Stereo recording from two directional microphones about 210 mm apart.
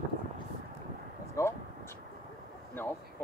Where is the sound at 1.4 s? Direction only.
15° left (ahead or behind).